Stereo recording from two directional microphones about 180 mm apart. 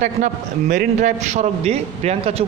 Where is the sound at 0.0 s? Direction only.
45° right (ahead or behind).